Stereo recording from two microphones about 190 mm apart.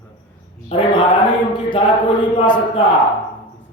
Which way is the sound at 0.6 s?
25° left (ahead or behind).